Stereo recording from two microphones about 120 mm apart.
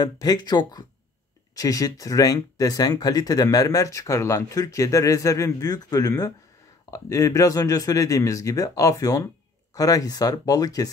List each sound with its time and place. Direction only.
0.0 s speech: 30° left (ahead or behind)